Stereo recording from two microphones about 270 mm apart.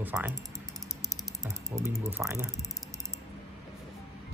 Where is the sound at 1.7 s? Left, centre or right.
Centre.